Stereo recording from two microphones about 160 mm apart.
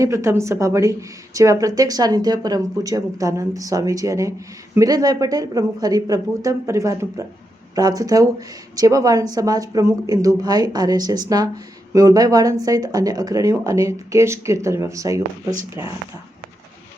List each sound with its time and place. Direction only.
0.0 s speech: 20° right (ahead or behind)